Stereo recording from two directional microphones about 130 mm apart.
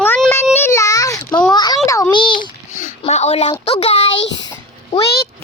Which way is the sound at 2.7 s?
75° left (ahead or behind).